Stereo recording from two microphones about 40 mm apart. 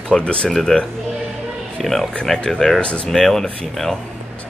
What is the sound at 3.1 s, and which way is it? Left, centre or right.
Speech, centre.